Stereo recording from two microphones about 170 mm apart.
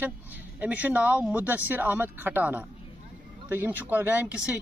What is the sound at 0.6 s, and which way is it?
Speech, 10° right (ahead or behind).